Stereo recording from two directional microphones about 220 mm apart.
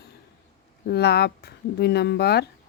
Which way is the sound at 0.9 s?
45° left (ahead or behind).